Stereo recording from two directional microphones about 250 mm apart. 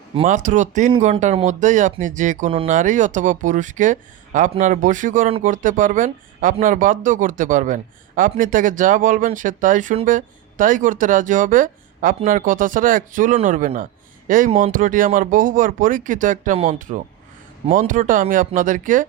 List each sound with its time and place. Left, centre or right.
0.2 s speech: right